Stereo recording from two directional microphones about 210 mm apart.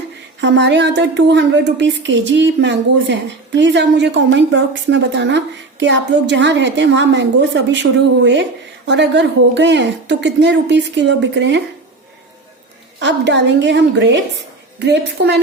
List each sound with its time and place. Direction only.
0.4 s a woman's voice: 55° right (ahead or behind)
13.0 s a woman's voice: 60° right (ahead or behind)